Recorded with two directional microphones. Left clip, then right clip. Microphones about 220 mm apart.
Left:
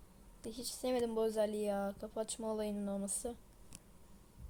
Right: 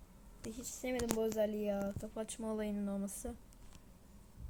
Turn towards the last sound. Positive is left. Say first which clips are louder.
# left 2 dB
turn(degrees=5)  # may be behind; listen again after turning